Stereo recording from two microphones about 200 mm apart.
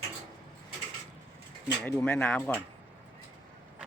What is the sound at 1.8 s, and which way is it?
Speech, 5° left (ahead or behind).